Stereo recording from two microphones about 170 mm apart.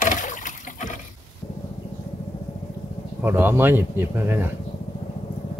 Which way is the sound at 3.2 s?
15° right (ahead or behind).